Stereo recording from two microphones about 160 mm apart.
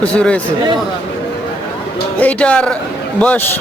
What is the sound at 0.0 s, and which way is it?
Speech, 5° left (ahead or behind).